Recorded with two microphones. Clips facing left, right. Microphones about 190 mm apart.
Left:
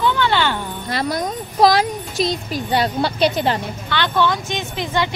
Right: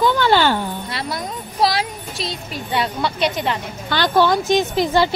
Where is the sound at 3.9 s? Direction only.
40° right (ahead or behind).